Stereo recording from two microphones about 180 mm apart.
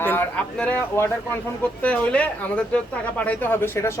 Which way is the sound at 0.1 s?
10° left (ahead or behind).